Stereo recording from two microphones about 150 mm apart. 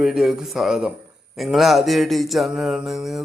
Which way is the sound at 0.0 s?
5° right (ahead or behind).